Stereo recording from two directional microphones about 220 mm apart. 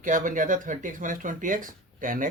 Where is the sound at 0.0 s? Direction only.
35° right (ahead or behind).